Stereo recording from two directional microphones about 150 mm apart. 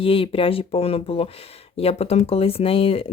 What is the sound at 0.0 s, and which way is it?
Speech, 40° left (ahead or behind).